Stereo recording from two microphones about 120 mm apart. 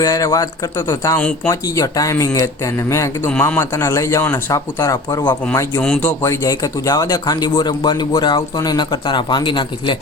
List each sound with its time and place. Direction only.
0.0 s speech: 30° left (ahead or behind)
3.2 s speech: 15° left (ahead or behind); by 5.4 s 35° left (ahead or behind)
5.8 s speech: 10° left (ahead or behind); by 10.0 s 40° left (ahead or behind)